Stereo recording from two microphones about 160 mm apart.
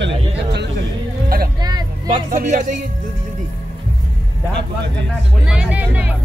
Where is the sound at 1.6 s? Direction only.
25° right (ahead or behind).